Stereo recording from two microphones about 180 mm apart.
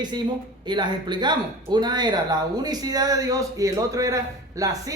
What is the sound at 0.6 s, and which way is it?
A man's voice, 25° right (ahead or behind).